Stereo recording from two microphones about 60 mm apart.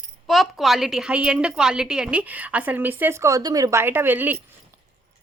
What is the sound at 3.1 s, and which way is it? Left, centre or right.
Speech, right.